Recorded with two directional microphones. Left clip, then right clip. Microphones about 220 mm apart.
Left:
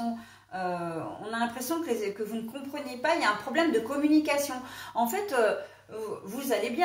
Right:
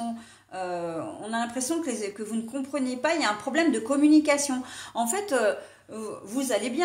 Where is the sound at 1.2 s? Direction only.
45° right (ahead or behind).